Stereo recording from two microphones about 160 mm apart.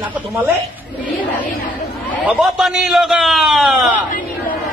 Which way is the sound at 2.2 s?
5° right (ahead or behind).